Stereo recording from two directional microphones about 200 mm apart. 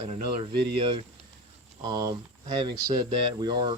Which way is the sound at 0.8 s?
25° right (ahead or behind).